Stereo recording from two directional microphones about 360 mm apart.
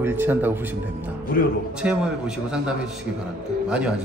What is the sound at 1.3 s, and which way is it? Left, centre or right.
Speech, left.